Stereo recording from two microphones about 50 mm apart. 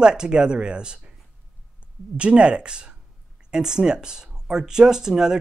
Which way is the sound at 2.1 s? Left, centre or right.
Right.